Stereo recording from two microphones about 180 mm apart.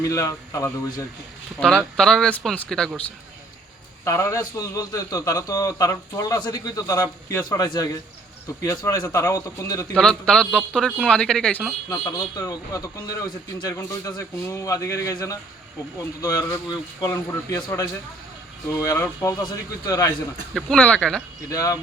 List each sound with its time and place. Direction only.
0.0 s a man's voice: 20° left (ahead or behind)
1.5 s speech: 5° left (ahead or behind)
4.0 s a man's voice: 15° left (ahead or behind)
9.9 s speech: 5° left (ahead or behind)
11.9 s a man's voice: 20° left (ahead or behind)
20.5 s speech: 5° left (ahead or behind)
21.5 s a man's voice: 20° left (ahead or behind)